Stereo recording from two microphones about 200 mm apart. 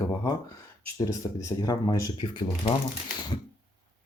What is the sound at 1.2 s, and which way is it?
Speech, 20° left (ahead or behind).